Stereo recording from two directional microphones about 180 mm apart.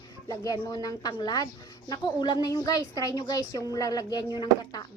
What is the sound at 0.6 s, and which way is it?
A woman's voice, 20° left (ahead or behind).